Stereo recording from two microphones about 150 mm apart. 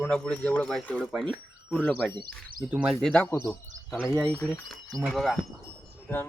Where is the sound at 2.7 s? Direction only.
10° right (ahead or behind).